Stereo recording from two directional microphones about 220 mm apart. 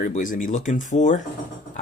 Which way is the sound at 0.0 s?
35° left (ahead or behind).